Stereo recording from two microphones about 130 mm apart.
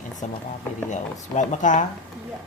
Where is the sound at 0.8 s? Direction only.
70° left (ahead or behind).